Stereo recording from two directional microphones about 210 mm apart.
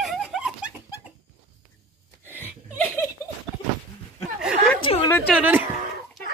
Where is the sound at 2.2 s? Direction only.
10° left (ahead or behind).